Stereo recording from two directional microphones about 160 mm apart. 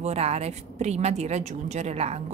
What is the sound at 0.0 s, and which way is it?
A woman's voice, 40° right (ahead or behind).